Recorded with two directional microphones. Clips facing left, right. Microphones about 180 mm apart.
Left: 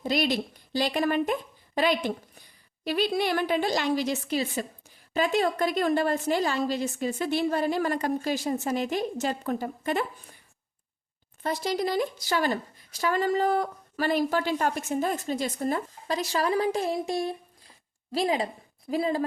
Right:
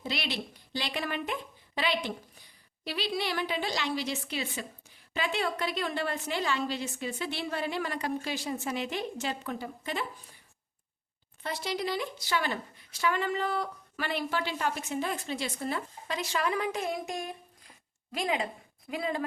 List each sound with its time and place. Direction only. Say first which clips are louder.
0.0 s a woman's voice: left 9 dB; 45° left (ahead or behind)
11.4 s a woman's voice: left 5 dB; 40° left (ahead or behind)